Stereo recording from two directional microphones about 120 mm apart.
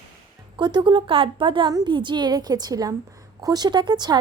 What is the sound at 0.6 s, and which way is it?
A woman's voice, 40° right (ahead or behind).